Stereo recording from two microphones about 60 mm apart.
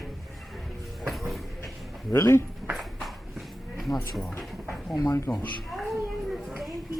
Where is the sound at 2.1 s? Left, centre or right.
Left.